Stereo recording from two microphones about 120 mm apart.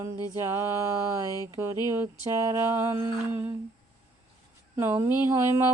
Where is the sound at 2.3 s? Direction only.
25° right (ahead or behind).